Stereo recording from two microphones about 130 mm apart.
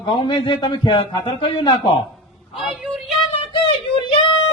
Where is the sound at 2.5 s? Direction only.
5° right (ahead or behind).